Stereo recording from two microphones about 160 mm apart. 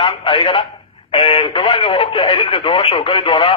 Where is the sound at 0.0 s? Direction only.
30° left (ahead or behind).